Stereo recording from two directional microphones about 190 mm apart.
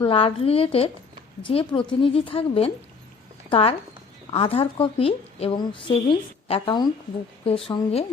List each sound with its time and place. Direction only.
0.0 s a woman's voice: 25° left (ahead or behind)